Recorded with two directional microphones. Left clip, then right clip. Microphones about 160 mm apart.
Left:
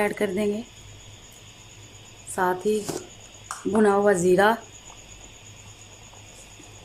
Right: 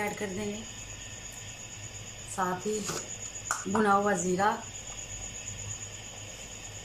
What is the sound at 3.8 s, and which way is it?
Speech, 50° left (ahead or behind).